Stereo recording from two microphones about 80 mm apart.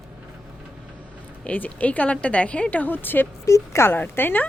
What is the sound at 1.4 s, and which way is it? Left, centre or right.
A woman's voice, centre.